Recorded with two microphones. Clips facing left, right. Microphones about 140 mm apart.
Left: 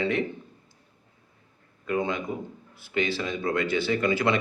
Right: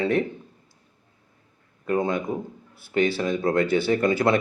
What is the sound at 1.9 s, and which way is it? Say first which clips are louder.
Speech: right 4 dB; 40° right (ahead or behind).